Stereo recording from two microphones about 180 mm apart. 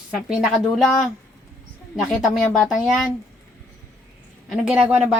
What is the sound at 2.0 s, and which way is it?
A woman's voice, centre (ahead or behind).